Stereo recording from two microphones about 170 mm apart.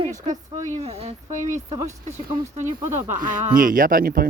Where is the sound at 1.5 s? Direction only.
15° right (ahead or behind).